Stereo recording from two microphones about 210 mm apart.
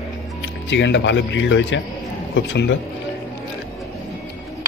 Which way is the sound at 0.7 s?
60° left (ahead or behind).